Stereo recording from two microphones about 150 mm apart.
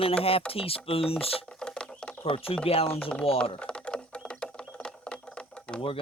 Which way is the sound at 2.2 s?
40° left (ahead or behind).